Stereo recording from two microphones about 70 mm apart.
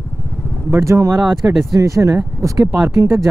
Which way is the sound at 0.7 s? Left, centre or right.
Right.